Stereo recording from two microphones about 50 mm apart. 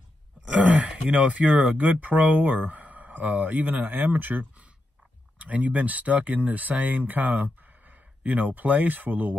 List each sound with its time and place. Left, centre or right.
0.5 s groan: right
0.8 s speech: right